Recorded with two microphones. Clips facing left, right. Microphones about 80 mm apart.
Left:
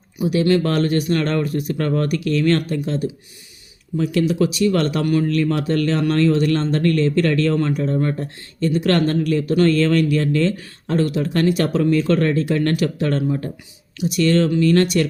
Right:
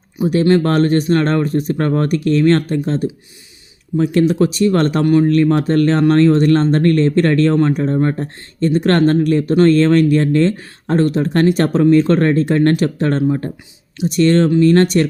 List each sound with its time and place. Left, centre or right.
0.2 s speech: right